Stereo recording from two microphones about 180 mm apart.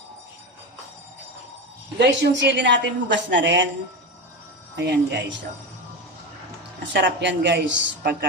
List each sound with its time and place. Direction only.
2.0 s a woman's voice: 75° right (ahead or behind)
4.8 s speech: 75° right (ahead or behind)
6.9 s a woman's voice: 80° right